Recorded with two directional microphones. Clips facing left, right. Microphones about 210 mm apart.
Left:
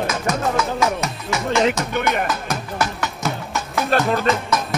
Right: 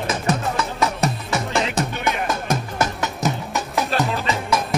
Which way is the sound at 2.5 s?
20° right (ahead or behind).